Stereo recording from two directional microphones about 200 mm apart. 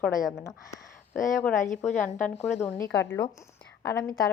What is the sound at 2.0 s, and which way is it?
A woman's voice, 5° left (ahead or behind).